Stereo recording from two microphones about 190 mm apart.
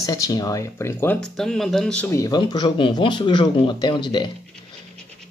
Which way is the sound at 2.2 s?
20° left (ahead or behind).